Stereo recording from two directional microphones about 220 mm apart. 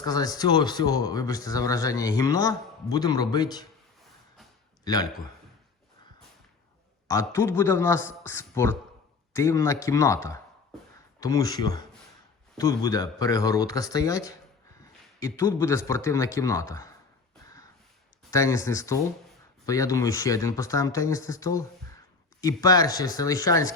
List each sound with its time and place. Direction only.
0.0 s speech: 15° left (ahead or behind)
7.1 s speech: 10° left (ahead or behind)
18.3 s speech: 15° left (ahead or behind)